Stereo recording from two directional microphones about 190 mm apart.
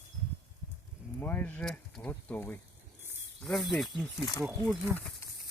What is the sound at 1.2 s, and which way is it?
Speech, 10° left (ahead or behind).